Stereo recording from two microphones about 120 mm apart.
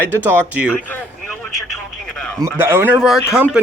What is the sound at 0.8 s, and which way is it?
A man's voice, 15° left (ahead or behind).